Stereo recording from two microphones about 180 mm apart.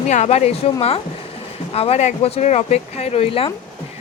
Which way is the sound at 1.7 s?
35° left (ahead or behind).